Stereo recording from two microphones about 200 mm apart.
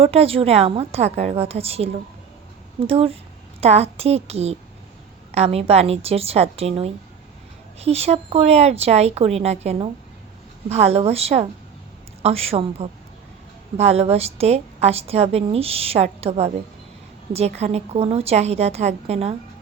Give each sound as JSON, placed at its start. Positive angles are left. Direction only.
{"t": 0.0, "sound": "a woman's voice", "side_deg": -30}